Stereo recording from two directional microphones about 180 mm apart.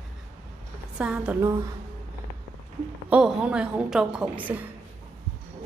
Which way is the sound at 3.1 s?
5° right (ahead or behind).